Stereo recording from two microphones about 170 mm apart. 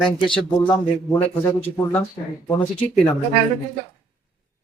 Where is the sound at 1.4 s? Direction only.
10° left (ahead or behind).